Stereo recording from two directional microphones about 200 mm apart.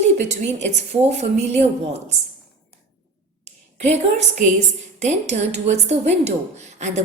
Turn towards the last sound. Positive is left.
turn(degrees=-35)  # may be behind; listen again after turning